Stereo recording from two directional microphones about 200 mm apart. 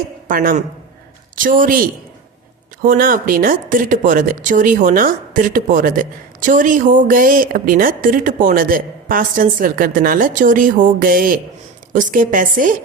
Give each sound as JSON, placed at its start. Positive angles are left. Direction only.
{"t": 0.3, "sound": "speech", "side_deg": -45}
{"t": 2.9, "sound": "a woman's voice", "side_deg": -45}